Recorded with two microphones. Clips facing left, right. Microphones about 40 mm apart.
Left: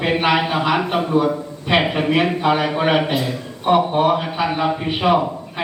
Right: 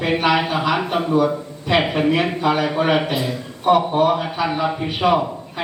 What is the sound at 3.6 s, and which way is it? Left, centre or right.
A man's voice, centre.